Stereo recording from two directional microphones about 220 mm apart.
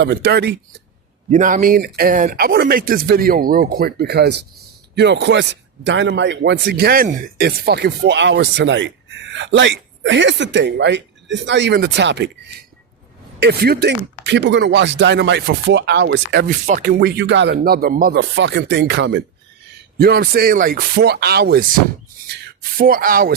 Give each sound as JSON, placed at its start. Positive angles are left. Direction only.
{"t": 0.0, "sound": "speech", "side_deg": -50}
{"t": 1.3, "sound": "speech", "side_deg": -35}